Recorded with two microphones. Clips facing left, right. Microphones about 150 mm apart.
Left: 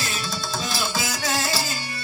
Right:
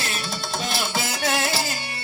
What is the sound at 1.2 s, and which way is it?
Music, 60° right (ahead or behind).